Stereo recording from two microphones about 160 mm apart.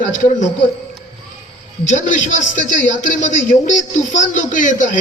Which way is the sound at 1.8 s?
50° left (ahead or behind).